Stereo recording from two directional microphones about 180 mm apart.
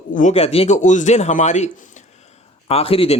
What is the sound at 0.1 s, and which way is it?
Speech, 45° left (ahead or behind).